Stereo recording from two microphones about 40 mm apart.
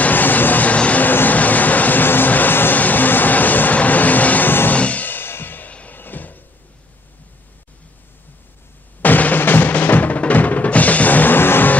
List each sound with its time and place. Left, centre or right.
0.0 s a sound: left
0.7 s vehicle: left
1.0 s vehicle: left
4.5 s music: left
4.7 s music: left
5.0 s music: left
5.7 s music: left
5.9 s cupboard open or close: left
9.0 s music: left
11.3 s music: left